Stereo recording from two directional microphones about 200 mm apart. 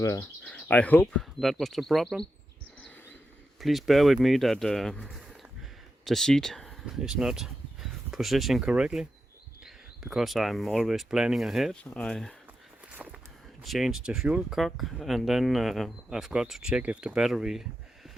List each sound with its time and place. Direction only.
0.0 s speech: 15° left (ahead or behind); by 2.2 s centre (ahead or behind)
3.6 s speech: centre (ahead or behind)
13.0 s walk: 10° right (ahead or behind)
13.6 s speech: centre (ahead or behind)